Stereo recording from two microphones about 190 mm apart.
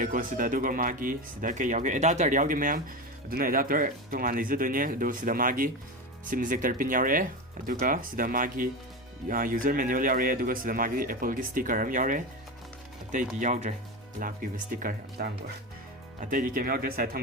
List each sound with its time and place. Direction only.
0.0 s speech: 45° right (ahead or behind)
13.4 s speech: 40° right (ahead or behind)